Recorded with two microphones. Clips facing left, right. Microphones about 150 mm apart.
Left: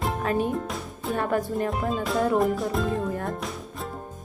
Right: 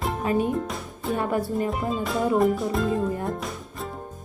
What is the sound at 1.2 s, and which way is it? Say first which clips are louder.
Music: even; 5° right (ahead or behind).